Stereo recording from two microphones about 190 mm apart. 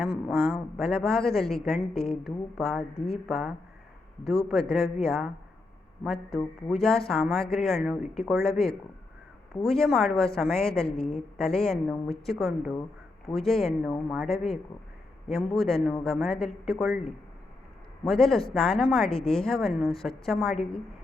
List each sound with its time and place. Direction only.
0.0 s a woman's voice: 5° right (ahead or behind)
10.9 s a woman's voice: 30° left (ahead or behind)
11.3 s a woman's voice: centre (ahead or behind)
18.1 s a woman's voice: centre (ahead or behind)